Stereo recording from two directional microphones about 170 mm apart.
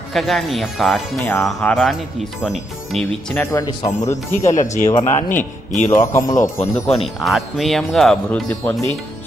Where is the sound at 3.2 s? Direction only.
15° left (ahead or behind).